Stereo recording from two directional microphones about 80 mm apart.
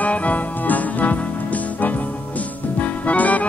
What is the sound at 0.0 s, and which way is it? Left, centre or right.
Music, centre.